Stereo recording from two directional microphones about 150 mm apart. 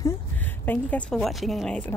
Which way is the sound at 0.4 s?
10° left (ahead or behind).